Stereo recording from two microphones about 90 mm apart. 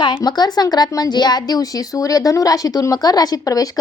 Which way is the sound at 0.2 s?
50° left (ahead or behind).